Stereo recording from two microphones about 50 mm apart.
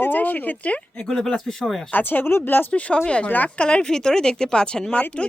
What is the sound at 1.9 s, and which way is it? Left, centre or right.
Speech, left.